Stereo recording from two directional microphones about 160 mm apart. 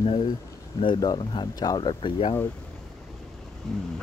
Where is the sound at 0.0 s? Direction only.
35° left (ahead or behind).